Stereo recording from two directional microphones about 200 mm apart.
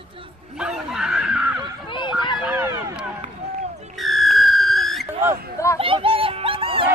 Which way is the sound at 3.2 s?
35° right (ahead or behind).